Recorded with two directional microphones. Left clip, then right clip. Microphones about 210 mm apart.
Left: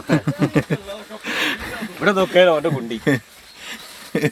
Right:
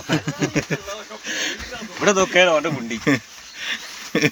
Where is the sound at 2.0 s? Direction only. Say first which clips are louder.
Left 1 dB; 35° left (ahead or behind).